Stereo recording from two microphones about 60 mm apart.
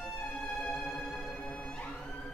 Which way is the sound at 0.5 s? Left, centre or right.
Centre.